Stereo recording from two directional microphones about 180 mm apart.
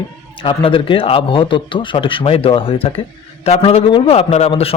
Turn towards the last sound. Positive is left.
turn(degrees=30)  # may be behind; listen again after turning